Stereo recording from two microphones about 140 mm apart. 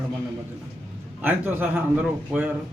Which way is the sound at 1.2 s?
15° right (ahead or behind).